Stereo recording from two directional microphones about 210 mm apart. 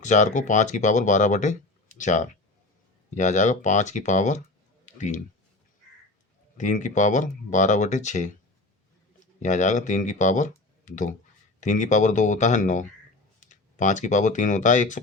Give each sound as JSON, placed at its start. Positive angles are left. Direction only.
{"t": 0.0, "sound": "speech", "side_deg": 35}
{"t": 6.6, "sound": "speech", "side_deg": 35}